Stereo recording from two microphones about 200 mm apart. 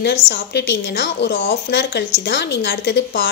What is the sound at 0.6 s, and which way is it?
A woman's voice, 55° left (ahead or behind).